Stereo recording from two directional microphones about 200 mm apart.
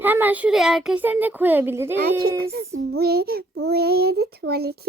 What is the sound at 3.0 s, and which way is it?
A child's voice, 50° right (ahead or behind).